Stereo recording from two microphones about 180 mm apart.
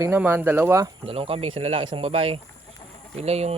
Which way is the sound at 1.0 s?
30° right (ahead or behind).